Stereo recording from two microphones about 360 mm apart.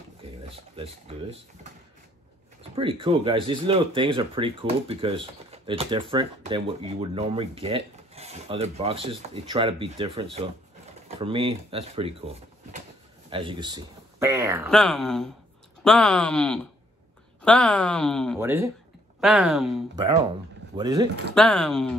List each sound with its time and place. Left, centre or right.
0.2 s a sound: centre
1.0 s speech: centre
2.7 s speech: centre
13.3 s a woman's voice: centre
21.4 s a woman's voice: centre